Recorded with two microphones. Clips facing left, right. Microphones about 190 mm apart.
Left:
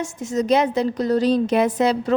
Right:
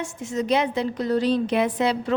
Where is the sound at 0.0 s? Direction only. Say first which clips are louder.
Left 4 dB; 40° left (ahead or behind).